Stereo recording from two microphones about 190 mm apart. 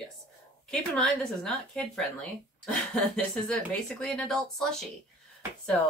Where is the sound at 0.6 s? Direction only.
Centre (ahead or behind).